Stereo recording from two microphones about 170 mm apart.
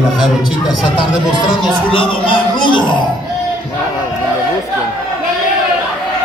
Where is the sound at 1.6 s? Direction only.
30° left (ahead or behind).